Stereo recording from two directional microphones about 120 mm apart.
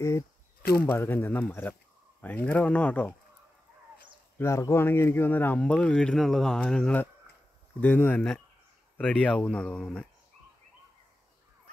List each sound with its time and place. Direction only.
0.0 s speech: 20° left (ahead or behind)
4.4 s speech: 25° left (ahead or behind); by 9.8 s 10° left (ahead or behind)